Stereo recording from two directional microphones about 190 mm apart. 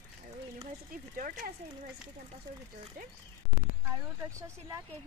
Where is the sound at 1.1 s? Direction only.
45° right (ahead or behind).